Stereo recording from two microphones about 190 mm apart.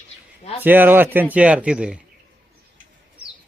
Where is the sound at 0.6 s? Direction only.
10° right (ahead or behind).